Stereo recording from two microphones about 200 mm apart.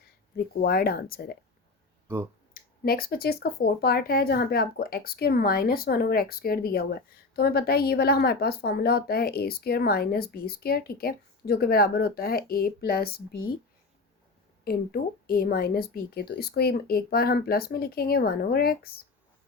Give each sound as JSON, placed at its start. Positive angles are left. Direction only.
{"t": 0.0, "sound": "speech", "side_deg": 50}
{"t": 2.5, "sound": "speech", "side_deg": 45}
{"t": 14.6, "sound": "speech", "side_deg": 50}